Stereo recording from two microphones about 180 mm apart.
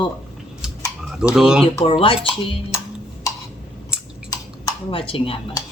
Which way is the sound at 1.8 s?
30° left (ahead or behind).